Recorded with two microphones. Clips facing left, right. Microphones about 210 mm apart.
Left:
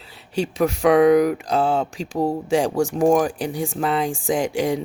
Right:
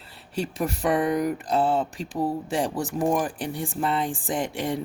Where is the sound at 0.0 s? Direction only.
Centre (ahead or behind).